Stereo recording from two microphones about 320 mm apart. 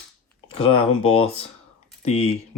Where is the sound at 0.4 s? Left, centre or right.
Centre.